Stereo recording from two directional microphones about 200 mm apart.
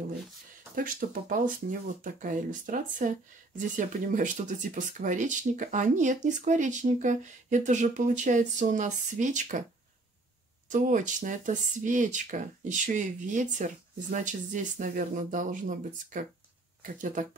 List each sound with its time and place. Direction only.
0.7 s speech: 45° right (ahead or behind)
10.7 s speech: 40° right (ahead or behind)